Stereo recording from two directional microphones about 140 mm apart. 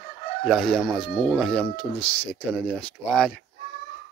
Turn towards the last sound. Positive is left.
turn(degrees=5)  # may be behind; listen again after turning